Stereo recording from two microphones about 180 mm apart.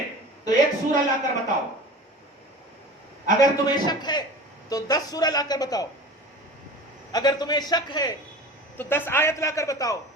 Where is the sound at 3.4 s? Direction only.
25° left (ahead or behind).